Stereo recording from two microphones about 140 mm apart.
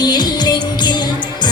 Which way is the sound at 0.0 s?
30° left (ahead or behind).